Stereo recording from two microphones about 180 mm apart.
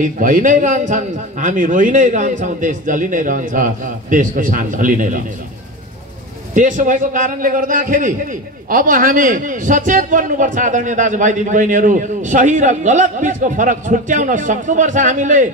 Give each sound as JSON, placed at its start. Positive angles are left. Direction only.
{"t": 0.0, "sound": "a man's voice", "side_deg": -50}
{"t": 6.5, "sound": "a man's voice", "side_deg": -45}